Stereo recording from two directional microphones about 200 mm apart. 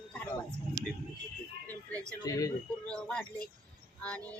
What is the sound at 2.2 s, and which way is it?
Speech, 15° left (ahead or behind).